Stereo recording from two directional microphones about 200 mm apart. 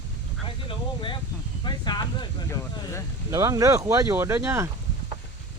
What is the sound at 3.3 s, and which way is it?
Speech, 15° right (ahead or behind).